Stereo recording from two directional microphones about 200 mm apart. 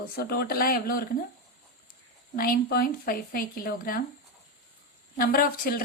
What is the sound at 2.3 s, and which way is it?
A woman's voice, 45° left (ahead or behind).